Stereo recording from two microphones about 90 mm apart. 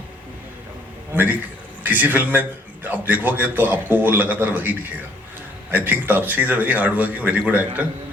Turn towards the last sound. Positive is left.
turn(degrees=-20)  # may be behind; listen again after turning